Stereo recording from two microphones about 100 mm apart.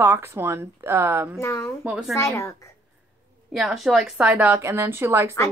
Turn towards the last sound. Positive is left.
turn(degrees=-25)  # may be behind; listen again after turning